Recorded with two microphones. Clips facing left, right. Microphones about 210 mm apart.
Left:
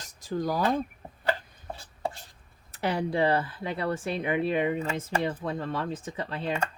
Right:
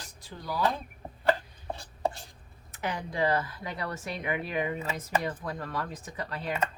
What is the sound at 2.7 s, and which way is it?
Speech, 35° left (ahead or behind).